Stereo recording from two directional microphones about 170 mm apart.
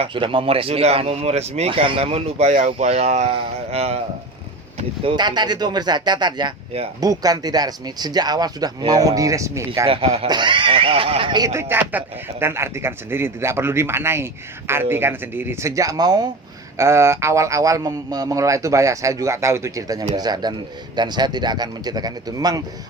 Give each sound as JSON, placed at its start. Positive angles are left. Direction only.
{"t": 0.0, "sound": "speech", "side_deg": -30}
{"t": 5.1, "sound": "a man's voice", "side_deg": -25}
{"t": 9.8, "sound": "a man's voice", "side_deg": -35}